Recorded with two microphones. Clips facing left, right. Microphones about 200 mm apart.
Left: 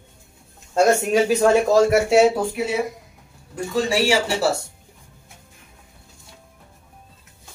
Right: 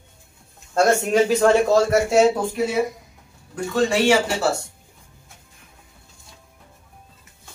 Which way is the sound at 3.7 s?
10° left (ahead or behind).